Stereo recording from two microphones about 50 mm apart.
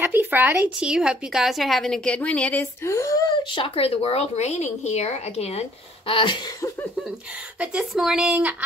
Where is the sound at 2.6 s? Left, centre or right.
Left.